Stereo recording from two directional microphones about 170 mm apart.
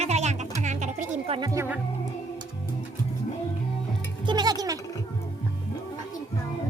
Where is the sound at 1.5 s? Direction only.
15° right (ahead or behind).